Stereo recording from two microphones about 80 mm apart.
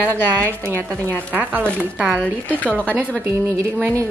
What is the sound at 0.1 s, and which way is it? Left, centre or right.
A woman's voice, right.